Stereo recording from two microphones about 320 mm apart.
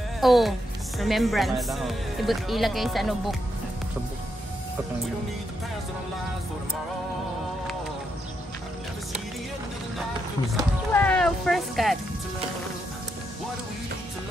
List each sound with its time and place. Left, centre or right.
0.2 s speech: centre
10.5 s speech: centre